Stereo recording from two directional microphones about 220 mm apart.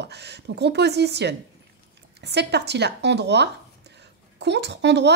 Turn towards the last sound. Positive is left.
turn(degrees=-50)  # may be behind; listen again after turning